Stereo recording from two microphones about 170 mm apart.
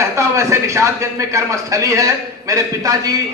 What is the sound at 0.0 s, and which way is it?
A man's voice, 15° right (ahead or behind).